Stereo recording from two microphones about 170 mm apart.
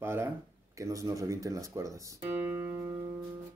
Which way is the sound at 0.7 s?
20° right (ahead or behind).